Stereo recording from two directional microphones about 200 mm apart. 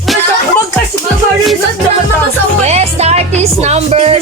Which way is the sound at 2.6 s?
35° right (ahead or behind).